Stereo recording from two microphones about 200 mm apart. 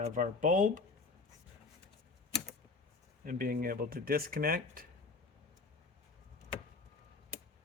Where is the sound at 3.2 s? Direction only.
45° right (ahead or behind).